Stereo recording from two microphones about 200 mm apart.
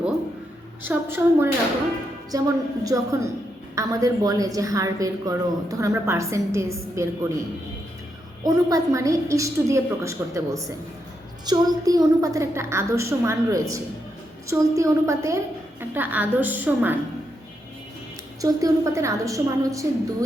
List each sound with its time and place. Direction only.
0.9 s a woman's voice: 10° right (ahead or behind)
8.4 s a woman's voice: 15° right (ahead or behind)
18.4 s a woman's voice: 15° right (ahead or behind)